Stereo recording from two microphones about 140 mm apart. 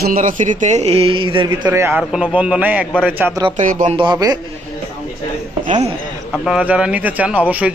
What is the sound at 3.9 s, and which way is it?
Speech, 30° right (ahead or behind).